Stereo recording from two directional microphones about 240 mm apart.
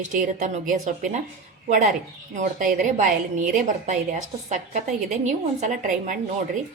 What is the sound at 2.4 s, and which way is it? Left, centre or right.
A woman's voice, right.